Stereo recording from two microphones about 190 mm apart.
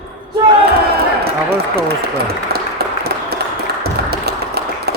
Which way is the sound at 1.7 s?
55° right (ahead or behind).